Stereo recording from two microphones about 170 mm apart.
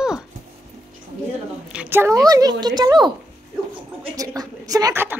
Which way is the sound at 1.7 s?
10° right (ahead or behind).